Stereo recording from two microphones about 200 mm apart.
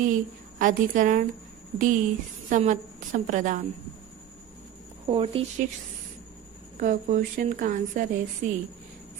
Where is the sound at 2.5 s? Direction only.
40° right (ahead or behind).